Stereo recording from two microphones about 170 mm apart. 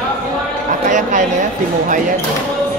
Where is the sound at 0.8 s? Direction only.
50° right (ahead or behind).